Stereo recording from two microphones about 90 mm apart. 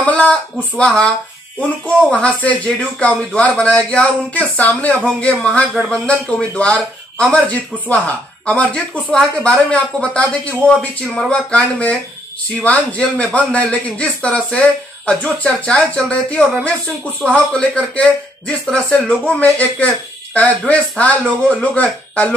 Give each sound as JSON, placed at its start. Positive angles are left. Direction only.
{"t": 0.0, "sound": "speech", "side_deg": 15}
{"t": 2.1, "sound": "a man's voice", "side_deg": 15}